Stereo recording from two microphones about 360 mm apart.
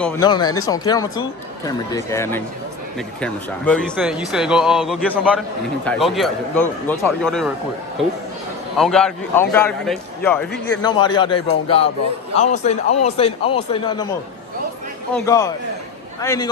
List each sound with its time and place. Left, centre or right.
0.0 s a man's voice: centre
8.7 s a man's voice: centre
15.1 s a man's voice: centre